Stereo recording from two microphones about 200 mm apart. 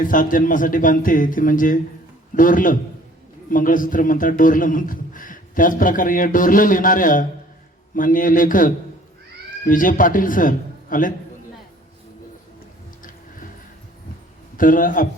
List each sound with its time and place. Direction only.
0.0 s a man's voice: 40° left (ahead or behind)
14.5 s a man's voice: 45° left (ahead or behind)